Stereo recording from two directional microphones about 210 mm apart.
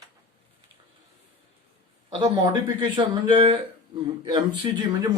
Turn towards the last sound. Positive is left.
turn(degrees=-20)  # may be behind; listen again after turning